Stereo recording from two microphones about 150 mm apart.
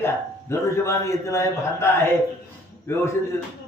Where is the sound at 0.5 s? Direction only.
20° left (ahead or behind).